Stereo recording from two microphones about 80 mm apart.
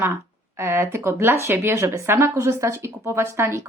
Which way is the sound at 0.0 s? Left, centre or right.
Right.